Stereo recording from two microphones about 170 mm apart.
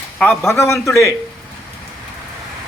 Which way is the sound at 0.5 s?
15° left (ahead or behind).